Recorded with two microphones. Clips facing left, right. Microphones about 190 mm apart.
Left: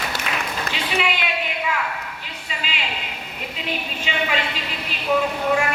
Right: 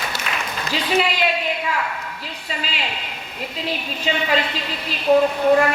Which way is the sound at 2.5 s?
40° right (ahead or behind).